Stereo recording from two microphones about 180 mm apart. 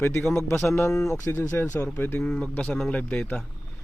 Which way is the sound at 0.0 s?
10° left (ahead or behind).